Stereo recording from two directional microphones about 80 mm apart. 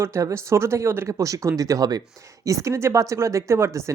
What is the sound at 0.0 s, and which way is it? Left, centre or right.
Speech, right.